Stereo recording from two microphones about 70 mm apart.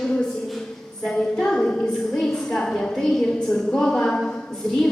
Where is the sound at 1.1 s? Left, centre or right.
Centre.